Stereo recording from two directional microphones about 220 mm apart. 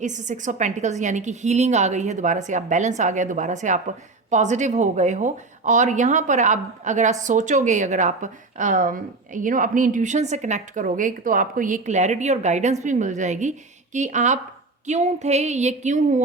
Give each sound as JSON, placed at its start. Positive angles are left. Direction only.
{"t": 0.0, "sound": "speech", "side_deg": -35}